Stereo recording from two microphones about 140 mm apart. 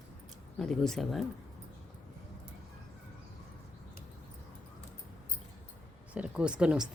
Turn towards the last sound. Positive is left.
turn(degrees=-5)  # may be behind; listen again after turning